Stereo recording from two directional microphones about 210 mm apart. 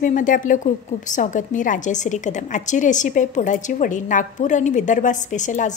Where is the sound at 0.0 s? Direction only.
40° left (ahead or behind).